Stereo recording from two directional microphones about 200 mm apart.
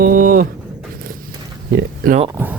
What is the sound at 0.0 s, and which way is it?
Vehicle, 45° right (ahead or behind).